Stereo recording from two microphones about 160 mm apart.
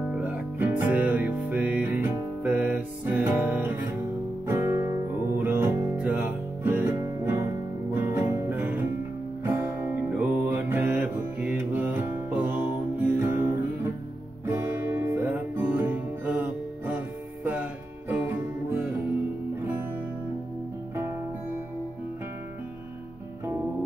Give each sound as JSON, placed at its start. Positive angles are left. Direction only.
{"t": 0.6, "sound": "music", "side_deg": -10}